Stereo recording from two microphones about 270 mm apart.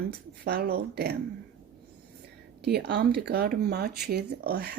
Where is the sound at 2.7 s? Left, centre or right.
Right.